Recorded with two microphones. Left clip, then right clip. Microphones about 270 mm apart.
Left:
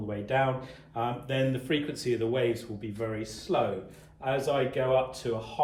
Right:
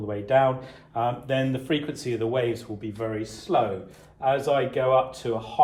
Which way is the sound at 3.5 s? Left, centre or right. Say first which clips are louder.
Right 5 dB; right.